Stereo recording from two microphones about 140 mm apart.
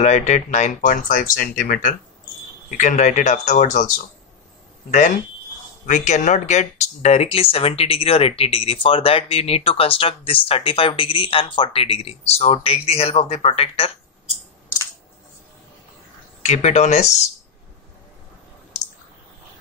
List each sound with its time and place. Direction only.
0.0 s speech: 55° left (ahead or behind); by 2.0 s 85° left
2.8 s speech: 60° left (ahead or behind)
4.9 s speech: 70° left (ahead or behind)
5.9 s speech: 60° left (ahead or behind)
16.4 s speech: 55° left (ahead or behind)